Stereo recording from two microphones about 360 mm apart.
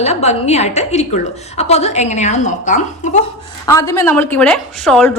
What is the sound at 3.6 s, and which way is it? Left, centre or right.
A woman's voice, centre.